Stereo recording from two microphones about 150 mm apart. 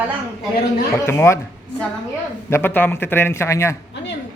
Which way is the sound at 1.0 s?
15° left (ahead or behind).